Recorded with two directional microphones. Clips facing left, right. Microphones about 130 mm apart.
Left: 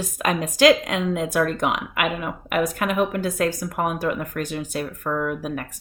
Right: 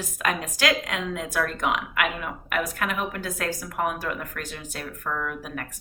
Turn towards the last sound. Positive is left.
turn(degrees=20)  # may be behind; listen again after turning